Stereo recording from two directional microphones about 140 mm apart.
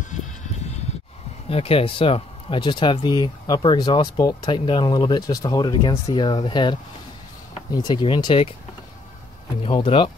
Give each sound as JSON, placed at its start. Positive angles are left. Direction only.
{"t": 1.5, "sound": "speech", "side_deg": 45}
{"t": 9.6, "sound": "speech", "side_deg": 45}